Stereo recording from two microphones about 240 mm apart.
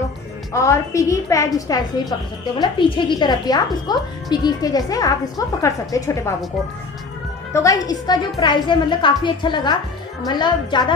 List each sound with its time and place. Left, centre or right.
0.5 s a woman's voice: centre
7.5 s a woman's voice: centre